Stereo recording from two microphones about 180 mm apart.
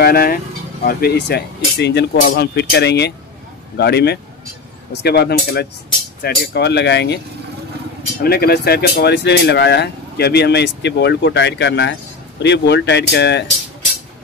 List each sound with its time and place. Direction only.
0.0 s speech: 55° left (ahead or behind); by 7.2 s 70° left (ahead or behind)
8.2 s speech: 60° left (ahead or behind)